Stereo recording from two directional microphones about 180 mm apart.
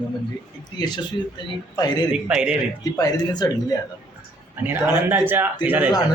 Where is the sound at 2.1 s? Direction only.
5° right (ahead or behind).